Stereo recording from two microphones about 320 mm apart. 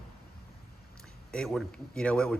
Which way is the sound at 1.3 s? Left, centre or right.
Centre.